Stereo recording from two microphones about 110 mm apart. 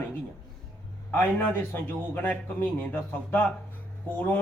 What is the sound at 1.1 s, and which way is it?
A man's voice, 15° left (ahead or behind).